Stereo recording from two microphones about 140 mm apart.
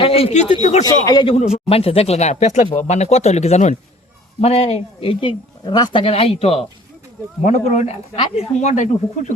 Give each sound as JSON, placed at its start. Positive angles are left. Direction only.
{"t": 0.0, "sound": "speech", "side_deg": 45}
{"t": 0.9, "sound": "speech", "side_deg": 30}
{"t": 1.5, "sound": "speech", "side_deg": 45}